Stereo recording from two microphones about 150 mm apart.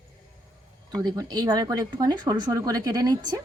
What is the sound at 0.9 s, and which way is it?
Speech, 25° right (ahead or behind).